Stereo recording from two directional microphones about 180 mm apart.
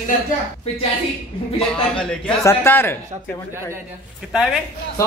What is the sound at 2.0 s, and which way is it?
Speech, 5° left (ahead or behind).